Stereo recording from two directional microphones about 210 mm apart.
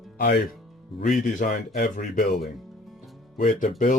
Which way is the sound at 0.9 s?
40° left (ahead or behind).